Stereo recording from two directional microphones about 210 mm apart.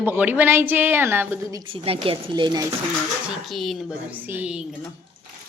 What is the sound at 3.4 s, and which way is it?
Speech, centre (ahead or behind).